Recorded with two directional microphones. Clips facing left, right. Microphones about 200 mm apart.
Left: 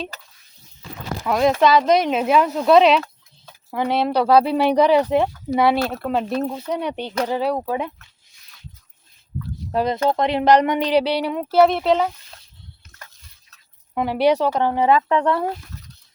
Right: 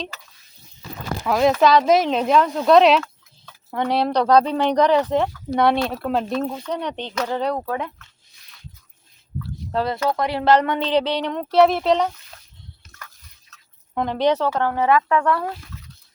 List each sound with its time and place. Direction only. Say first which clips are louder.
1.2 s speech: even; centre (ahead or behind)
6.6 s speech: left 2 dB; 10° left (ahead or behind)
9.7 s speech: left 2 dB; 20° left (ahead or behind)
13.0 s a sound: right 2 dB; 25° left (ahead or behind)
13.9 s speech: left 2 dB; 10° left (ahead or behind); by 15.4 s 25° left (ahead or behind)